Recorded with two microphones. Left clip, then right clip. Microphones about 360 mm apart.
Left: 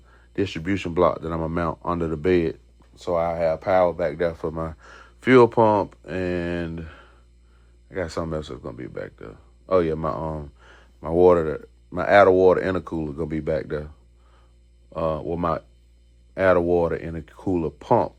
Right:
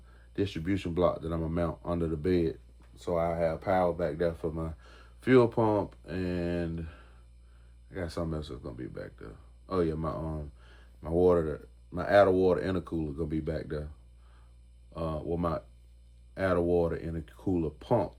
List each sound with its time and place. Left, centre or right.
0.3 s speech: centre
14.9 s speech: centre